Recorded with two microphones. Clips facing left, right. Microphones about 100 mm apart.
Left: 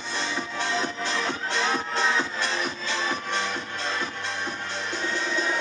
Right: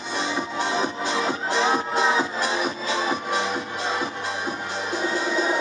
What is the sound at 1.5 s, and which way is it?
Music, 10° right (ahead or behind).